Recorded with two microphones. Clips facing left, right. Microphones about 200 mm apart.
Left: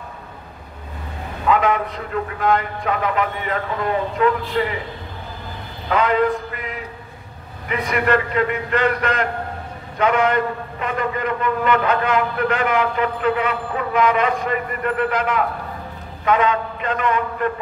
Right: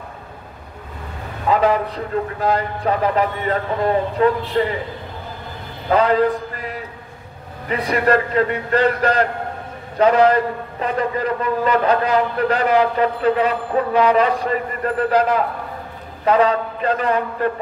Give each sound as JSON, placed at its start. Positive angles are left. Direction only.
{"t": 1.5, "sound": "a man's voice", "side_deg": -35}
{"t": 5.9, "sound": "a man's voice", "side_deg": -35}